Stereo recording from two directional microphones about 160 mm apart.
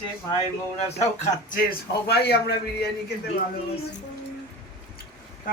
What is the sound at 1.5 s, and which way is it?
Speech, 75° left (ahead or behind).